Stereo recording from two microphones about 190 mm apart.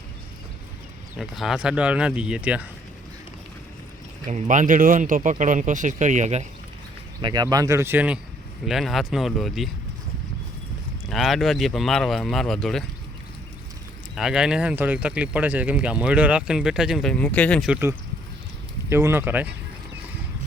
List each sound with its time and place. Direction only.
1.1 s speech: centre (ahead or behind)
4.3 s speech: 40° right (ahead or behind)
7.2 s speech: 20° right (ahead or behind); by 9.6 s centre (ahead or behind)
11.1 s speech: centre (ahead or behind)
14.2 s speech: 5° right (ahead or behind)
17.7 s speech: 10° right (ahead or behind)